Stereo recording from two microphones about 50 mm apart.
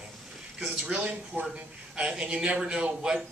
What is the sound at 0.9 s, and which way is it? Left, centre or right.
A man's voice, right.